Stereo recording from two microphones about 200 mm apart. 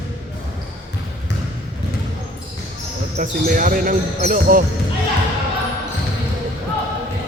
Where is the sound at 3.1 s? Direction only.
40° right (ahead or behind).